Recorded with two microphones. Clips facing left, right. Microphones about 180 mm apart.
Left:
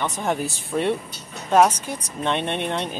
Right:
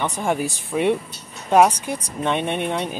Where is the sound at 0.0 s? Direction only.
10° right (ahead or behind).